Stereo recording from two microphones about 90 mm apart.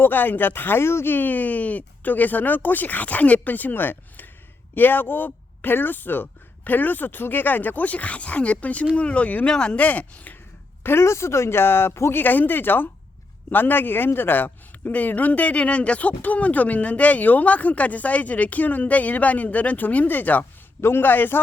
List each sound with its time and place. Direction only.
0.0 s a man's voice: 20° left (ahead or behind)
10.8 s a man's voice: 30° left (ahead or behind)